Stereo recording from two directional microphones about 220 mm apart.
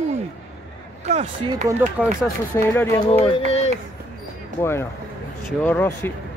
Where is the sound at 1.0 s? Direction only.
30° right (ahead or behind).